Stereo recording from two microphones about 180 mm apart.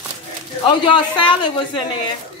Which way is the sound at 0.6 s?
25° left (ahead or behind).